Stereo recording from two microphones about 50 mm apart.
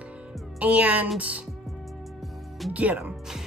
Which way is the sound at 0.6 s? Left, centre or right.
Right.